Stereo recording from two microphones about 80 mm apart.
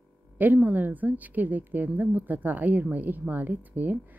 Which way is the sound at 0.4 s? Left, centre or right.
Right.